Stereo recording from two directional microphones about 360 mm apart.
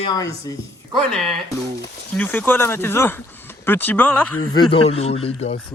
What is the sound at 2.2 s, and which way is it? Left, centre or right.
Speech, centre.